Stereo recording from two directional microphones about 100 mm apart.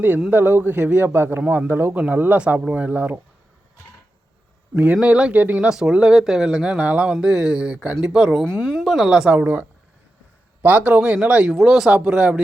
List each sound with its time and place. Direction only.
0.3 s a man's voice: 20° right (ahead or behind)
4.7 s a woman's voice: 15° right (ahead or behind)
9.4 s a man's voice: 20° right (ahead or behind)